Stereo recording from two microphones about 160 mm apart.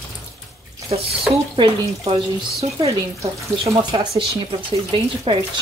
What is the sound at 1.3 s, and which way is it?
Speech, 35° right (ahead or behind).